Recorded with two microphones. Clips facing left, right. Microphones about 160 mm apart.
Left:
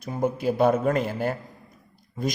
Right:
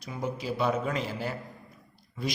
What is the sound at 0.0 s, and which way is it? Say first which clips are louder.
A man's voice: left 9 dB; 50° left (ahead or behind).